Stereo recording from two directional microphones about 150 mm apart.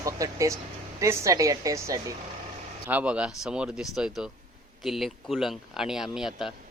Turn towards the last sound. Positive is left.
turn(degrees=0)  # may be behind; listen again after turning